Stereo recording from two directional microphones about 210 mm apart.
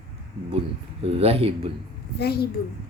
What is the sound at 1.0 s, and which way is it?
Speech, 25° right (ahead or behind).